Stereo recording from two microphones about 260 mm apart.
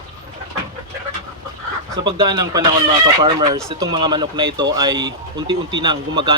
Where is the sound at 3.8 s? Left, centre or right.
Centre.